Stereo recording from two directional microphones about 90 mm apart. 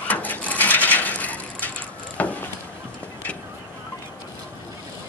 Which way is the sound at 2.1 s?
15° left (ahead or behind).